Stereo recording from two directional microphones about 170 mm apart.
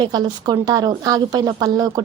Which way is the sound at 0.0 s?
25° right (ahead or behind).